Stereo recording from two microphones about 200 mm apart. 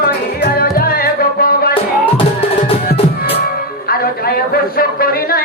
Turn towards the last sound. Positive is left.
turn(degrees=50)  # may be behind; listen again after turning